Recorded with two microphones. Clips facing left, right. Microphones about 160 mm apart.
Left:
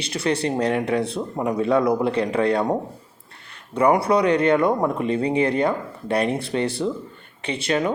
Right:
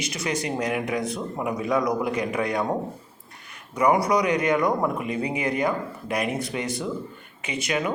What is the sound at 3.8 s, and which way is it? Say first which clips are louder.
Speech: left 3 dB; 30° left (ahead or behind).